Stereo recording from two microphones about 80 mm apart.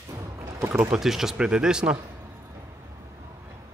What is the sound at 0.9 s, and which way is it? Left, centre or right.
Speech, centre.